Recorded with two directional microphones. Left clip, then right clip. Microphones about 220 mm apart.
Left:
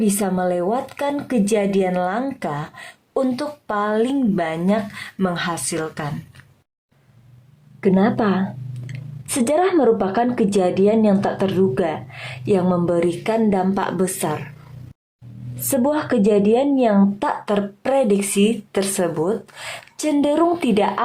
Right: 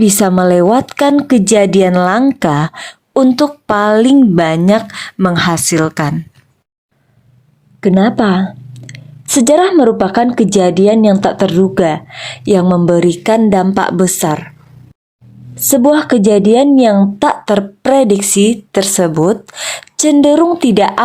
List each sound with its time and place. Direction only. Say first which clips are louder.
0.0 s a woman's voice: right 10 dB; 40° right (ahead or behind)
7.8 s a woman's voice: right 7 dB; 25° right (ahead or behind)
15.6 s a woman's voice: right 10 dB; 30° right (ahead or behind)